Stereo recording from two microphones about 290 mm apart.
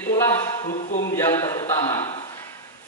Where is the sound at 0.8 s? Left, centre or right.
Left.